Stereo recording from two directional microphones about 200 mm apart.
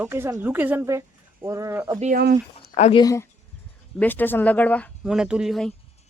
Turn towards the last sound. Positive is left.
turn(degrees=0)  # may be behind; listen again after turning